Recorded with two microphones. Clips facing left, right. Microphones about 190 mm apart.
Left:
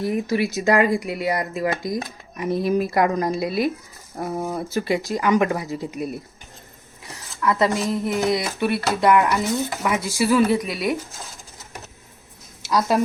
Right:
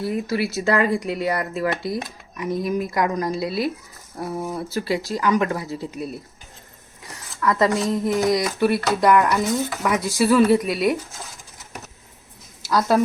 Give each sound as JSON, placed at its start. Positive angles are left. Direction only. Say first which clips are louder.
{"t": 0.0, "sound": "speech", "louder": "left 2 dB", "side_deg": 20}
{"t": 2.3, "sound": "speech", "louder": "left 3 dB", "side_deg": 30}
{"t": 7.4, "sound": "speech", "louder": "right 1 dB", "side_deg": 10}